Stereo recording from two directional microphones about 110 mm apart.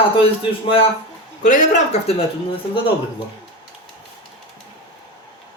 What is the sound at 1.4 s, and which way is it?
Speech, 75° left (ahead or behind).